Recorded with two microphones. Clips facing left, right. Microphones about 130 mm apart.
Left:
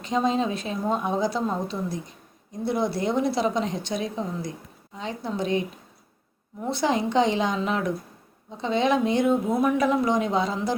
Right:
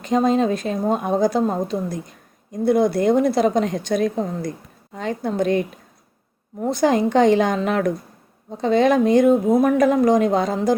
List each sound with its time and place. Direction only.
0.0 s speech: 50° right (ahead or behind)